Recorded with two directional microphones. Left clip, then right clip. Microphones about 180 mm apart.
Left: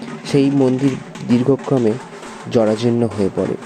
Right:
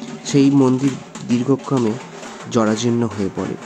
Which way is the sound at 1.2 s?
15° left (ahead or behind).